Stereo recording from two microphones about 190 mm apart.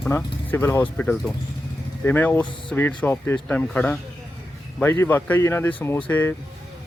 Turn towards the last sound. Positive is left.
turn(degrees=10)  # may be behind; listen again after turning